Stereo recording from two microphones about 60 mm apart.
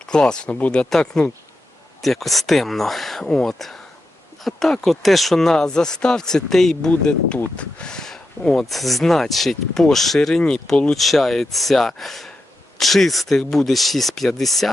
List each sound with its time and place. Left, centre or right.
0.0 s speech: centre
0.9 s speech: centre
7.0 s speech: centre
10.9 s speech: centre